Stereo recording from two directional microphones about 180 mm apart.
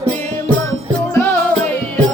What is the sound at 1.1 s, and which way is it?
Music, 10° left (ahead or behind).